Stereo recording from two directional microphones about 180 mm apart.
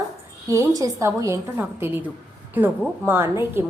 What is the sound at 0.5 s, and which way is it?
A woman's voice, 20° right (ahead or behind).